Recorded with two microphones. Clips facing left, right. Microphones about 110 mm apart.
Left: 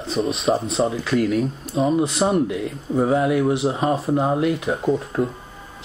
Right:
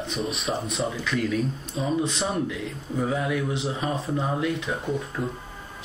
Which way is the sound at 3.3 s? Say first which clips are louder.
Left 8 dB; 75° left (ahead or behind).